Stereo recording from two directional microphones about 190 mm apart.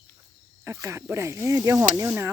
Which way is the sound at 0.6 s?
15° right (ahead or behind).